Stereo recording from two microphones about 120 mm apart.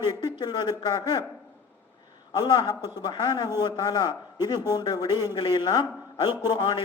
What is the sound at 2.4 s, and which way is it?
A man's voice, 35° left (ahead or behind).